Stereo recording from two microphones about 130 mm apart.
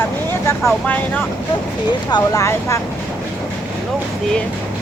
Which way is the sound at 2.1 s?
25° left (ahead or behind).